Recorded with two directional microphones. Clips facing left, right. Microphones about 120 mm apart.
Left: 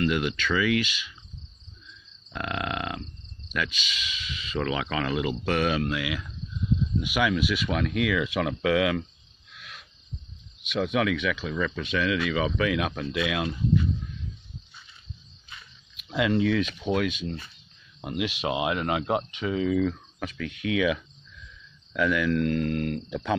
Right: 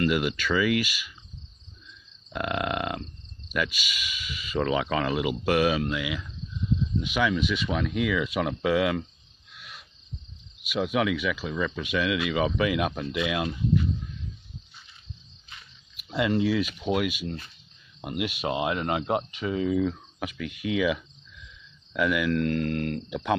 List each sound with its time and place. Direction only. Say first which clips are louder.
0.1 s speech: right 1 dB; 10° right (ahead or behind)
2.3 s speech: right 3 dB; 10° right (ahead or behind)
7.0 s speech: even; 10° left (ahead or behind)
9.5 s owl: even; centre (ahead or behind)
10.6 s speech: even; 5° right (ahead or behind)
16.0 s speech: left 1 dB; 5° right (ahead or behind)
19.3 s speech: left 1 dB; 35° right (ahead or behind)
19.7 s speech: left 1 dB; 20° right (ahead or behind)
22.4 s speech: left 1 dB; 25° left (ahead or behind)
23.0 s speech: right 1 dB; 10° right (ahead or behind)